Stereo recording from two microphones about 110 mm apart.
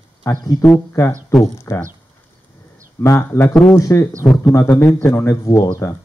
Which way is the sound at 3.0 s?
30° left (ahead or behind).